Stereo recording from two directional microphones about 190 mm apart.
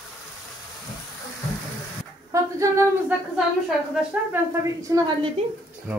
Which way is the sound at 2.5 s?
15° right (ahead or behind).